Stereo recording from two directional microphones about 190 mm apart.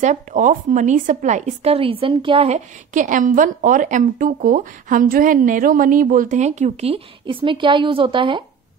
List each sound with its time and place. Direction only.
0.0 s a woman's voice: 40° right (ahead or behind)